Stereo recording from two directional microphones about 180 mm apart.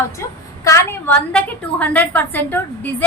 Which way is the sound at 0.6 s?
15° left (ahead or behind).